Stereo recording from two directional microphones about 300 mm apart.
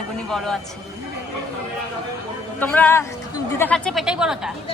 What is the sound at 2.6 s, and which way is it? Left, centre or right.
Speech, centre.